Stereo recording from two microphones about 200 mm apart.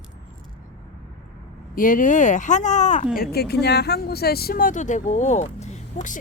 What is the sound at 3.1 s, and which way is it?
Speech, 50° left (ahead or behind).